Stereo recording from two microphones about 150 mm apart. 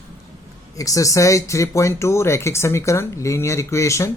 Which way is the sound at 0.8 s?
20° left (ahead or behind).